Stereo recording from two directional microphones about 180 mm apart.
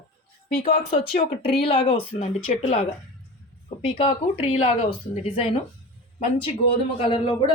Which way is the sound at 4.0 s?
35° left (ahead or behind).